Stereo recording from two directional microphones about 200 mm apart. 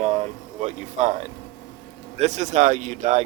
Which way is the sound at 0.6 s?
35° right (ahead or behind).